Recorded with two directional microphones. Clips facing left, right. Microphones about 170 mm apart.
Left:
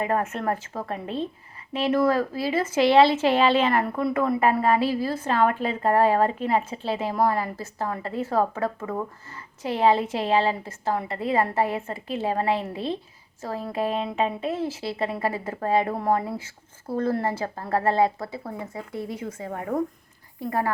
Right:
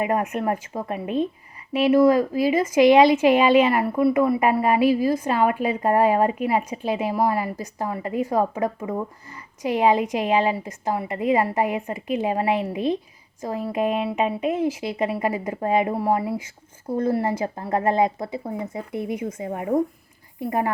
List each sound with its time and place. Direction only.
0.0 s speech: 15° right (ahead or behind)